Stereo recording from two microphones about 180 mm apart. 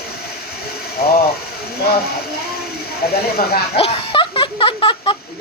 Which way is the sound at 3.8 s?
30° left (ahead or behind).